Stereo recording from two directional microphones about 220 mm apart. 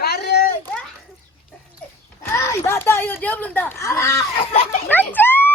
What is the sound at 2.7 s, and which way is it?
Speech, 10° left (ahead or behind).